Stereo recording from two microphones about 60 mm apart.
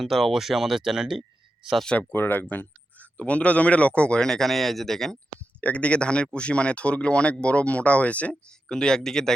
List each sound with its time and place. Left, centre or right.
0.0 s speech: centre
2.0 s speech: left; by 5.1 s centre
5.5 s speech: left